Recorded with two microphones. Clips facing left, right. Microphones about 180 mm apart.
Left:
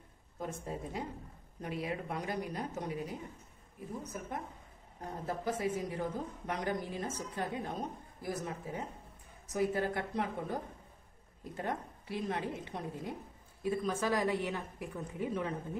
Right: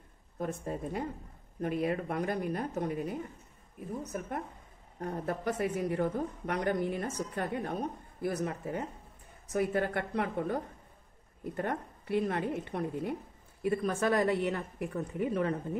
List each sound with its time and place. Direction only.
0.4 s speech: 55° right (ahead or behind)
5.0 s a woman's voice: 65° right (ahead or behind)